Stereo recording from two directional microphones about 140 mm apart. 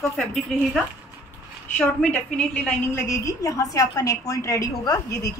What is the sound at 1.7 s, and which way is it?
A woman's voice, 10° left (ahead or behind).